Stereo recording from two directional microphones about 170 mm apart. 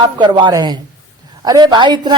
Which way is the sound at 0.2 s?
25° right (ahead or behind).